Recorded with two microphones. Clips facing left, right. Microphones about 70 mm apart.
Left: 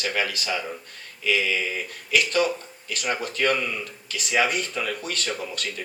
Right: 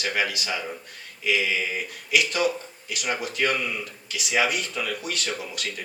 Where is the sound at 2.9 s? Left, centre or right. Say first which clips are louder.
Left 1 dB; left.